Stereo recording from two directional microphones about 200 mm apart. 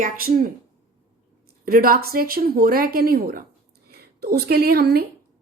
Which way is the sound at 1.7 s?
45° right (ahead or behind).